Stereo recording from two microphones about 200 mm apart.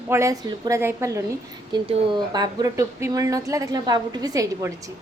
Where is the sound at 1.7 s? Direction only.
25° right (ahead or behind).